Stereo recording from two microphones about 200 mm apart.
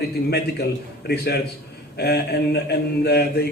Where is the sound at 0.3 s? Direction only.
55° left (ahead or behind).